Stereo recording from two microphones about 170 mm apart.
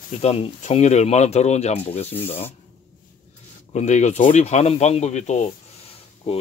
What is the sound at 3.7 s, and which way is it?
Speech, 40° left (ahead or behind).